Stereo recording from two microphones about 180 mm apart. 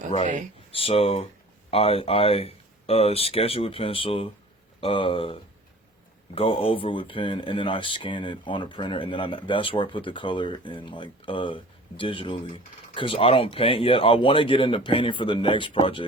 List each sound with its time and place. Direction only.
0.7 s speech: 30° left (ahead or behind)